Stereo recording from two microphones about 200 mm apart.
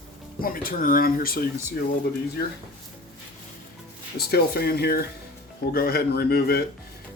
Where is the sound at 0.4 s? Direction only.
45° left (ahead or behind).